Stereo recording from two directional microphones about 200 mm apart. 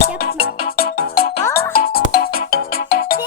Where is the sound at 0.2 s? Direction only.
50° left (ahead or behind).